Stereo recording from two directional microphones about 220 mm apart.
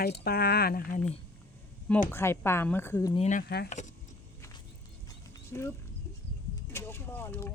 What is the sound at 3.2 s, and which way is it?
Speech, 40° left (ahead or behind).